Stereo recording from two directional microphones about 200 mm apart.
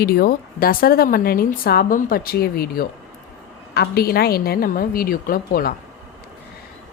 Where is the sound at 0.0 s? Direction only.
50° left (ahead or behind).